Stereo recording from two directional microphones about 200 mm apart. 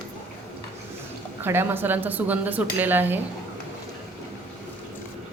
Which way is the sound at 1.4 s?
10° right (ahead or behind).